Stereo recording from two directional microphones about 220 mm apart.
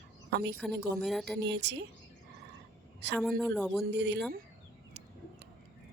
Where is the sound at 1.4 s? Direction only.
50° right (ahead or behind).